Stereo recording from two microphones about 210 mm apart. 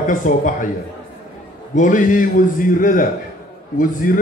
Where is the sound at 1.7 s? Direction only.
35° left (ahead or behind).